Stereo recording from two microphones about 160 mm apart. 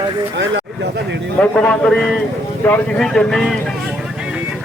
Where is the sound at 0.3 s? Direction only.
90° right.